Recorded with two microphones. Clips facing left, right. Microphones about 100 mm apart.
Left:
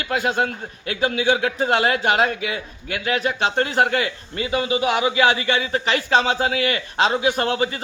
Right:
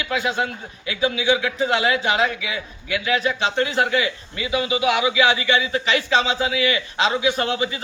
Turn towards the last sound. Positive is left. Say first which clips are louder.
# left 1 dB
turn(degrees=45)  # may be behind; listen again after turning